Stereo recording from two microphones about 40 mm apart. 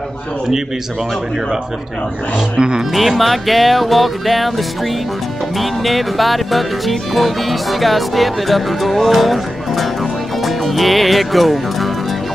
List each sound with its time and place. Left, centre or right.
2.3 s speech: right
2.9 s music: centre
10.4 s speech: centre